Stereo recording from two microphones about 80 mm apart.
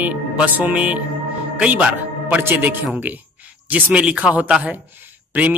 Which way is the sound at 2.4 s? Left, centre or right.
Right.